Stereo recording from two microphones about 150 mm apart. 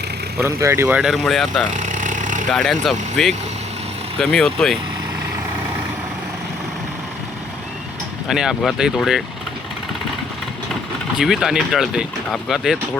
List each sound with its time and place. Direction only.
0.3 s speech: 15° right (ahead or behind); by 1.6 s centre (ahead or behind)
1.7 s a sound: 55° right (ahead or behind)
2.5 s speech: 5° left (ahead or behind)
8.3 s speech: 5° right (ahead or behind)
11.2 s speech: 5° right (ahead or behind)